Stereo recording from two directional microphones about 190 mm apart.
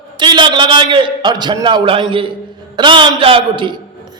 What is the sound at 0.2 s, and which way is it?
A man's voice, 25° right (ahead or behind).